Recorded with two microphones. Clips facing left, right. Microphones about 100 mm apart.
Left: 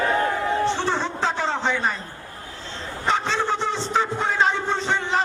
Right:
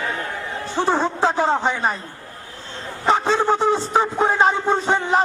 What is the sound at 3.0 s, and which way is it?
A man's voice, 45° right (ahead or behind).